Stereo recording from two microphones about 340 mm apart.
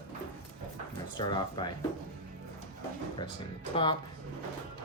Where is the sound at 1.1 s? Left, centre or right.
Centre.